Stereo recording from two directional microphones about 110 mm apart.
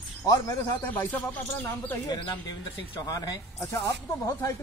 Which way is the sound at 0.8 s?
15° left (ahead or behind).